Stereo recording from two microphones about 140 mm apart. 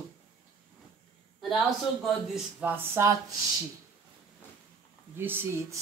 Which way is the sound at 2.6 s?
10° right (ahead or behind).